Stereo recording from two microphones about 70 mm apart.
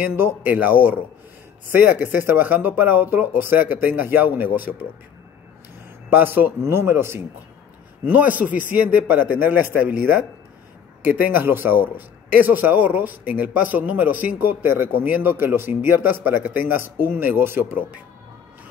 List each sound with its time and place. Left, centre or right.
0.0 s speech: right
6.0 s speech: right
8.1 s speech: right
11.1 s speech: right